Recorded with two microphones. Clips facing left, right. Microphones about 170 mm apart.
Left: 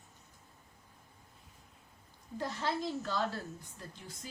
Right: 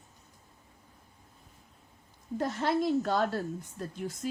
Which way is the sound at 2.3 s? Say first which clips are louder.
Right 7 dB; 55° right (ahead or behind).